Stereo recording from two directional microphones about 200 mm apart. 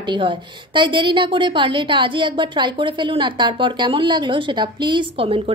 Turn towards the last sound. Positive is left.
turn(degrees=-25)  # may be behind; listen again after turning